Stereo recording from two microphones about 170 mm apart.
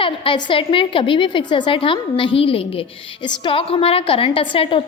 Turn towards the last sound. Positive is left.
turn(degrees=30)  # may be behind; listen again after turning